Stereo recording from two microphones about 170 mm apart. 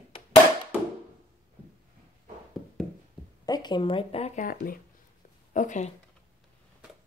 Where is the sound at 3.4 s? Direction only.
25° left (ahead or behind).